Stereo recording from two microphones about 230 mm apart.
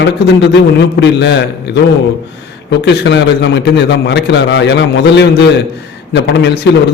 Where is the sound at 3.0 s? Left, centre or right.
Left.